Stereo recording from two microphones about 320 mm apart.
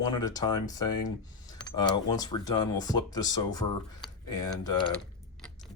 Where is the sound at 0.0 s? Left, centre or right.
Centre.